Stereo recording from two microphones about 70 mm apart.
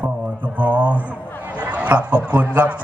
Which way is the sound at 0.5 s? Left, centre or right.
Right.